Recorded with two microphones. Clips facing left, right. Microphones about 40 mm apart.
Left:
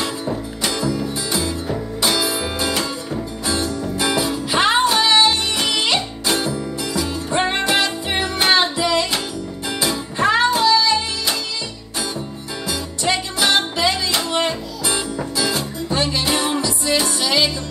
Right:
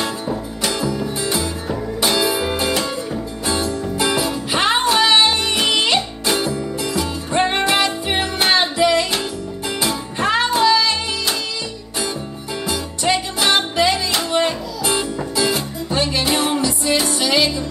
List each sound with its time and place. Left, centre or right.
0.3 s music: centre
0.7 s music: centre
2.7 s music: centre
3.4 s music: centre
13.0 s music: centre